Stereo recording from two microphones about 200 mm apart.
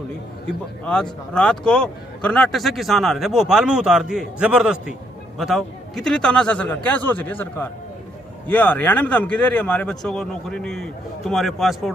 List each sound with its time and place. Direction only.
0.4 s a man's voice: 5° left (ahead or behind)